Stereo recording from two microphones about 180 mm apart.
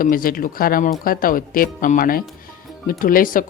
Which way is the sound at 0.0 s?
50° left (ahead or behind).